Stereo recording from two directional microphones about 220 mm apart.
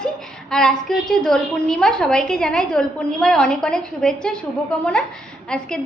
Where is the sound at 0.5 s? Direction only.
Centre (ahead or behind).